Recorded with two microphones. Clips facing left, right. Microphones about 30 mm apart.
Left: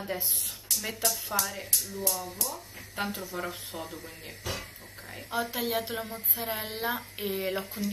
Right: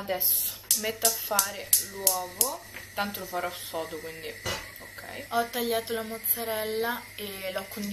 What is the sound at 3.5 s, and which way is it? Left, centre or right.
Speech, right.